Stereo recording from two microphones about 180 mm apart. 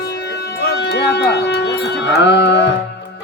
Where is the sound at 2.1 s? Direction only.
75° left (ahead or behind).